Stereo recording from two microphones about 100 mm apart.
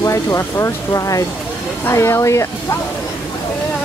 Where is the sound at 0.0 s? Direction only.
30° left (ahead or behind).